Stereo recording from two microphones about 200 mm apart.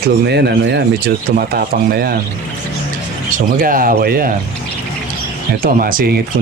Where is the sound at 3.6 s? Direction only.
45° right (ahead or behind).